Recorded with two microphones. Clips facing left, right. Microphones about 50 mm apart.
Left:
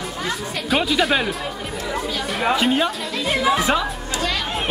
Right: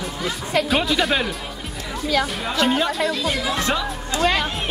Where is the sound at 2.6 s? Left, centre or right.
Centre.